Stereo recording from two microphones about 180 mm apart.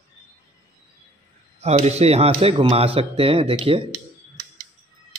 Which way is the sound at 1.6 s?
35° right (ahead or behind).